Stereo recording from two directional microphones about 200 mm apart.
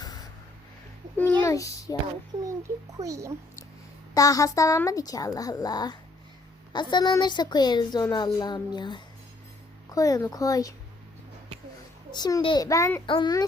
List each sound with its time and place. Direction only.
1.2 s a child's voice: 10° left (ahead or behind)
3.0 s speech: 15° right (ahead or behind)
4.1 s a child's voice: 15° left (ahead or behind)
12.1 s a child's voice: 20° left (ahead or behind)